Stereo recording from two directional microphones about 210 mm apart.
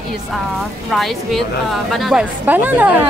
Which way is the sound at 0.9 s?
Centre (ahead or behind).